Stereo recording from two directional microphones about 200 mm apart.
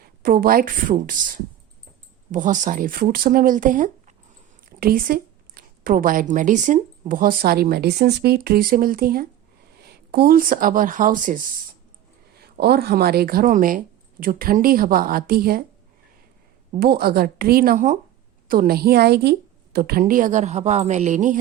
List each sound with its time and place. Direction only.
0.0 s a woman's voice: 50° right (ahead or behind)
12.4 s speech: 55° right (ahead or behind)
16.8 s speech: 50° right (ahead or behind)